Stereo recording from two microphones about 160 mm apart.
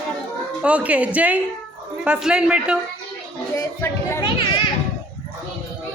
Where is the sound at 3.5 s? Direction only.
15° left (ahead or behind).